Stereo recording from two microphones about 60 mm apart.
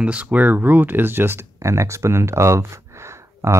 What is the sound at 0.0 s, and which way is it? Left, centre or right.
Speech, right.